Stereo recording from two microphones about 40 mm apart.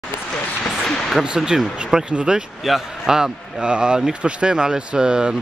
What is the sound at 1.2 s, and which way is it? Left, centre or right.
Speech, centre.